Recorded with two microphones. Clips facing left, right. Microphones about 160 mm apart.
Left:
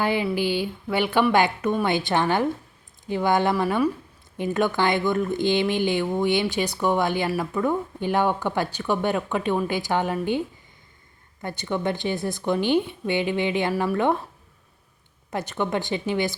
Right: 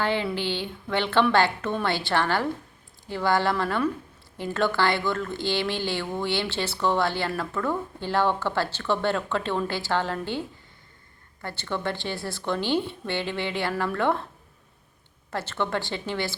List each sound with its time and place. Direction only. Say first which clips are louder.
0.0 s speech: left 3 dB; 10° left (ahead or behind)
11.4 s speech: left 4 dB; 15° left (ahead or behind)
15.3 s speech: left 2 dB; 15° left (ahead or behind)